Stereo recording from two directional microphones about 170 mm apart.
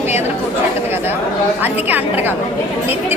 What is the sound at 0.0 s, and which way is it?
Chatter, 15° right (ahead or behind).